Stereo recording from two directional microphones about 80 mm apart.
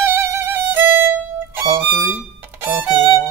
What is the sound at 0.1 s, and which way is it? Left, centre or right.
Violin, right.